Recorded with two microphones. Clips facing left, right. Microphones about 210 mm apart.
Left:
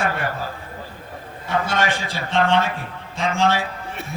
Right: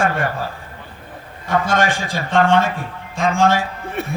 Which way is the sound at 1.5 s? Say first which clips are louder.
Right 4 dB; 50° right (ahead or behind).